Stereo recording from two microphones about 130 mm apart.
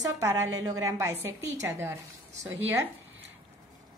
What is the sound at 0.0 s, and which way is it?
A woman's voice, 25° right (ahead or behind).